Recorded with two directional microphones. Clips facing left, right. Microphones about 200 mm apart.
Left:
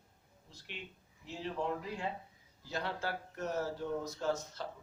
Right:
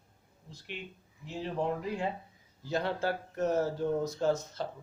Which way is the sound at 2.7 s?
25° right (ahead or behind).